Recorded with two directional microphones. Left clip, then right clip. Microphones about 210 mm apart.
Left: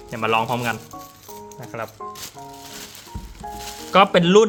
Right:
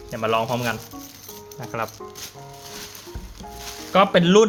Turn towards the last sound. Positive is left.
turn(degrees=10)  # may be behind; listen again after turning